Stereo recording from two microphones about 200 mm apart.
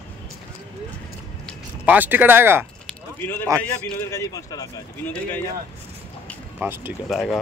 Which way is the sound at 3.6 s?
10° left (ahead or behind).